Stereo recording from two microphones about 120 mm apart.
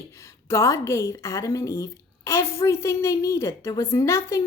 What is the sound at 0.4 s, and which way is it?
Speech, 25° left (ahead or behind).